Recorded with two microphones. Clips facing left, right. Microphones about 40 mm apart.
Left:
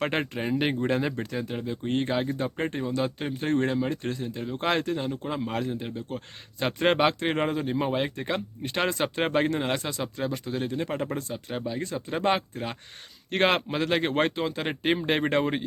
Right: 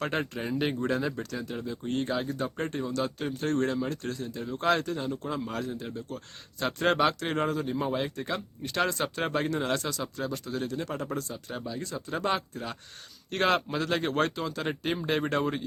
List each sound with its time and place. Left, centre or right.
0.0 s speech: left